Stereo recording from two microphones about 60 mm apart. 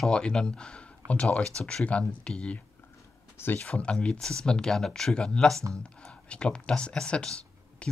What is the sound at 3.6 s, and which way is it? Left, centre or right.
Speech, centre.